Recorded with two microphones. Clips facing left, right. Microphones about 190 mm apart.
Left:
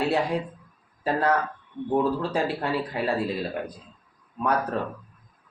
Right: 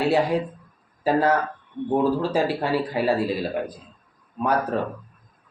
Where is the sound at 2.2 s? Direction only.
5° right (ahead or behind).